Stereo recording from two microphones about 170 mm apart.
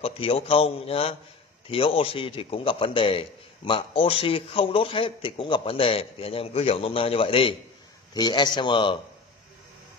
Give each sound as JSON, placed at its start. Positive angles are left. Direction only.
{"t": 0.0, "sound": "a man's voice", "side_deg": 35}